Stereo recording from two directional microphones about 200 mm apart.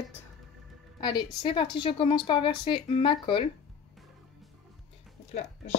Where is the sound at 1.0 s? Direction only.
25° left (ahead or behind).